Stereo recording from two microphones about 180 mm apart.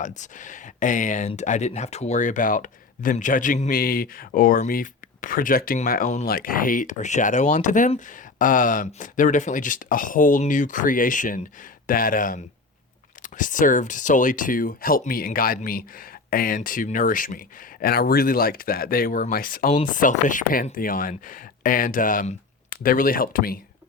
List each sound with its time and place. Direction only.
0.0 s speech: 40° left (ahead or behind)